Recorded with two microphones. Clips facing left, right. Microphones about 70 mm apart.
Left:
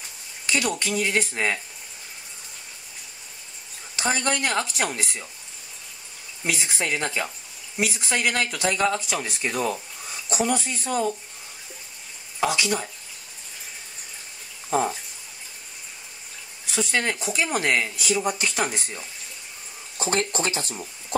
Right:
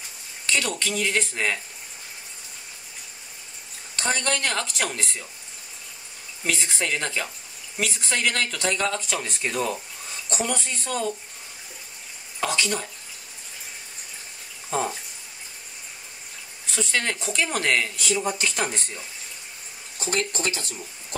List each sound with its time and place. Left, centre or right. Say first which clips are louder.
0.5 s speech: left 1 dB; centre
3.9 s speech: left 1 dB; centre
6.4 s speech: even; centre
12.4 s speech: left 2 dB; centre
14.7 s speech: left 3 dB; centre
16.7 s speech: left 2 dB; centre
20.0 s speech: left 2 dB; left